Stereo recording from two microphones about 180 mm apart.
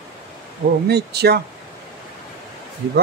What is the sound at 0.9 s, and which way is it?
Speech, 65° right (ahead or behind).